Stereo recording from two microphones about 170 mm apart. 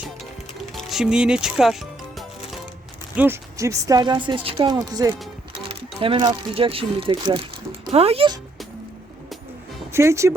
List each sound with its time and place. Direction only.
0.8 s speech: centre (ahead or behind)
3.2 s a woman's voice: 15° right (ahead or behind); by 8.4 s 35° right (ahead or behind)
9.9 s speech: 15° right (ahead or behind)